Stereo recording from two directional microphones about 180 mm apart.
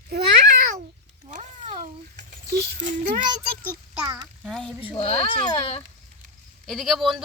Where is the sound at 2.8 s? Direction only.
45° right (ahead or behind).